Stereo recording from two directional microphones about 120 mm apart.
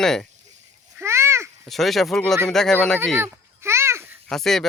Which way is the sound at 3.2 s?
20° right (ahead or behind).